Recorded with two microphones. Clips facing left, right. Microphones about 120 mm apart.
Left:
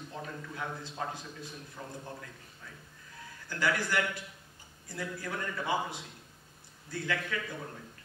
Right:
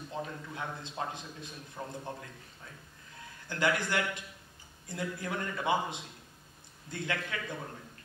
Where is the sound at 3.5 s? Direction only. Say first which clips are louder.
Right 1 dB; 20° right (ahead or behind).